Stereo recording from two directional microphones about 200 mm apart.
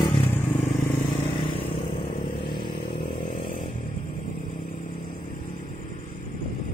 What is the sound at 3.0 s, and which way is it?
Motorcycle, 45° left (ahead or behind).